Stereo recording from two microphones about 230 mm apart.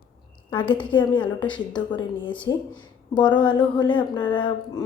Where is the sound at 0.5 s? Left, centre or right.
Left.